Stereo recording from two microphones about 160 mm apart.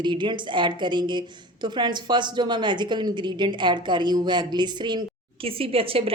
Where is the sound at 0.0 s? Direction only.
30° right (ahead or behind).